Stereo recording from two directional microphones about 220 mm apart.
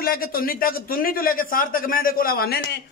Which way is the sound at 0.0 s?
40° left (ahead or behind).